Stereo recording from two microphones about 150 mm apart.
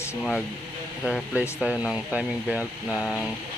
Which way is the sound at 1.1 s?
5° right (ahead or behind).